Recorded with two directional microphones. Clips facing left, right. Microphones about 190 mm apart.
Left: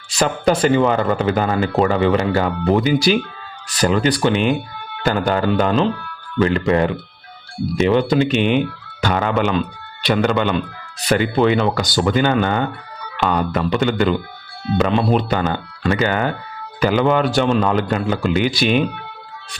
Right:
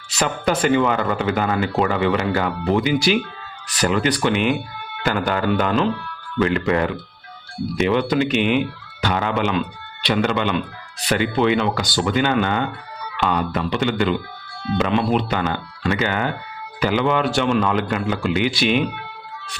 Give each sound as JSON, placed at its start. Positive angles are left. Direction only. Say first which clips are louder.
{"t": 0.2, "sound": "speech", "louder": "left 4 dB", "side_deg": 35}